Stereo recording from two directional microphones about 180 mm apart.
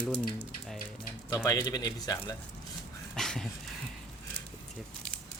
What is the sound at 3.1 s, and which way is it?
Dog, centre (ahead or behind).